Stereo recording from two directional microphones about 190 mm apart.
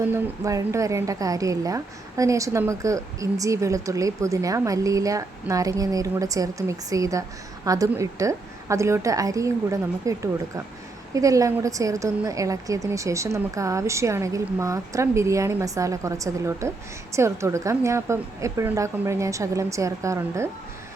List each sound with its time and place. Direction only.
0.0 s a woman's voice: 15° right (ahead or behind)